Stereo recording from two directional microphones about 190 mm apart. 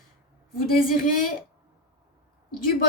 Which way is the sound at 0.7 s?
45° left (ahead or behind).